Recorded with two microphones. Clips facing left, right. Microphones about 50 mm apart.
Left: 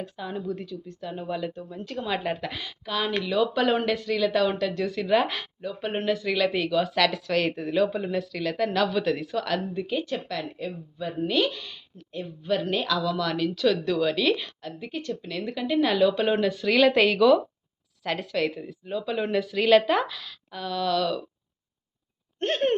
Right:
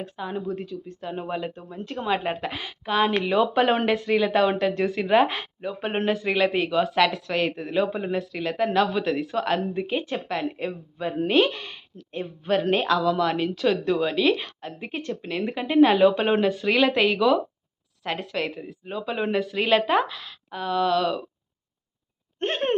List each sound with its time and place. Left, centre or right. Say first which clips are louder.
0.2 s a woman's voice: right 3 dB; centre
7.1 s a woman's voice: even; centre
19.4 s a woman's voice: left 3 dB; centre; by 21.2 s right
22.4 s a sound: left 1 dB; centre